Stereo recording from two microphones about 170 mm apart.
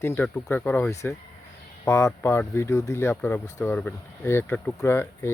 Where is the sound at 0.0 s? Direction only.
10° left (ahead or behind).